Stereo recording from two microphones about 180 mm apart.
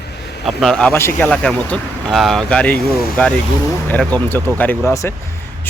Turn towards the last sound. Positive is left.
turn(degrees=10)  # may be behind; listen again after turning